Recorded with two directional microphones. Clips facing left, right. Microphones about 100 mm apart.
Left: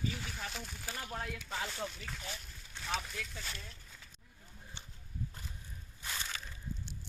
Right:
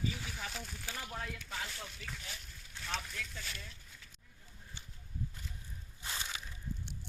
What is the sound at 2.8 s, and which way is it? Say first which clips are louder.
Speech: left 2 dB; 15° left (ahead or behind).